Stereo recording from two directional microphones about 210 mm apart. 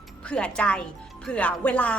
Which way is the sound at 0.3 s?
5° left (ahead or behind).